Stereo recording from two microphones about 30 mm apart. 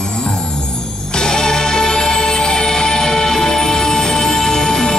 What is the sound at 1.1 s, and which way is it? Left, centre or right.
Music, left.